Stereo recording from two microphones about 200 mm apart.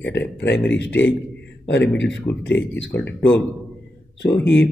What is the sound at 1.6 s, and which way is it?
Speech, 60° left (ahead or behind).